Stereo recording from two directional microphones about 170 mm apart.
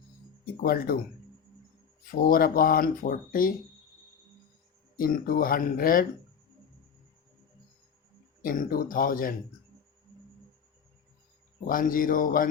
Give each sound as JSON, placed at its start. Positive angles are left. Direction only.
{"t": 0.5, "sound": "speech", "side_deg": 60}
{"t": 2.2, "sound": "speech", "side_deg": 60}
{"t": 4.9, "sound": "speech", "side_deg": 55}
{"t": 8.4, "sound": "speech", "side_deg": 55}
{"t": 11.6, "sound": "speech", "side_deg": 55}